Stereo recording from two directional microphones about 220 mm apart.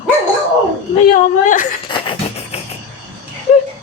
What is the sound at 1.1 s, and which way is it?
Speech, 35° left (ahead or behind).